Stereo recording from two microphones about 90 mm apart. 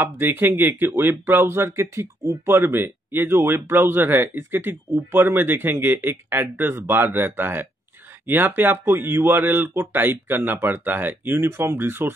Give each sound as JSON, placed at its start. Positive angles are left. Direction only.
{"t": 0.0, "sound": "speech", "side_deg": -25}